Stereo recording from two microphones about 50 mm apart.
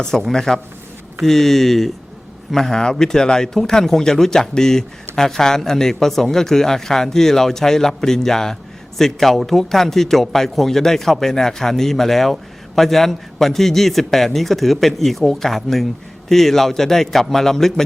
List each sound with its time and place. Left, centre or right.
0.0 s speech: centre